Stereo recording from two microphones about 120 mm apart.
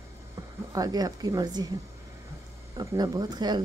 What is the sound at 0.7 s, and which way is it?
Speech, 30° right (ahead or behind).